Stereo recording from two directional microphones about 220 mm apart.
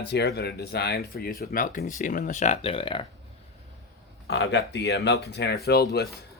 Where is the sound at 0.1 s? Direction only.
50° left (ahead or behind); by 3.1 s 25° left (ahead or behind).